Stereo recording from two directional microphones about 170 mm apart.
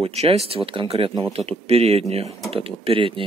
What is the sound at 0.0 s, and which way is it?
Speech, 35° right (ahead or behind).